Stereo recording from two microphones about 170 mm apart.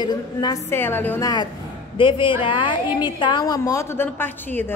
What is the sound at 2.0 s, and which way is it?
A woman's voice, 30° left (ahead or behind).